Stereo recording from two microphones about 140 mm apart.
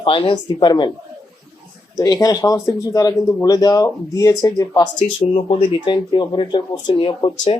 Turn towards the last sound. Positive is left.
turn(degrees=35)  # may be behind; listen again after turning